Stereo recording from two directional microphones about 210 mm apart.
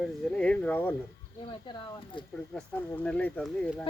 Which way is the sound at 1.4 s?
25° left (ahead or behind).